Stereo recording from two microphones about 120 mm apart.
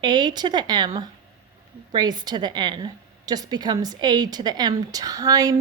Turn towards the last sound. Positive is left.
turn(degrees=-30)  # may be behind; listen again after turning